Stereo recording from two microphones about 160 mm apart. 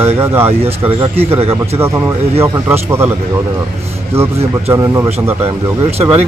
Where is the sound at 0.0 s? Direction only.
15° right (ahead or behind).